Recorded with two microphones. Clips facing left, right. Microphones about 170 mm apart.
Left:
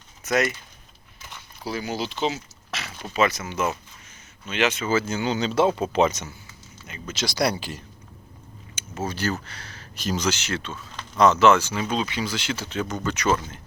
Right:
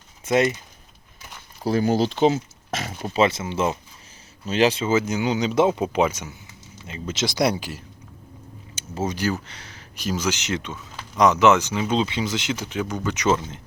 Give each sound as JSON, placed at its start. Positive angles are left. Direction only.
{"t": 0.3, "sound": "speech", "side_deg": -25}
{"t": 1.6, "sound": "speech", "side_deg": -50}
{"t": 3.1, "sound": "speech", "side_deg": -30}
{"t": 7.1, "sound": "speech", "side_deg": -20}
{"t": 9.0, "sound": "speech", "side_deg": -15}